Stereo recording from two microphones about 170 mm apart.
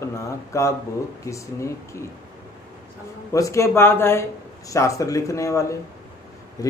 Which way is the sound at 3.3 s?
20° left (ahead or behind).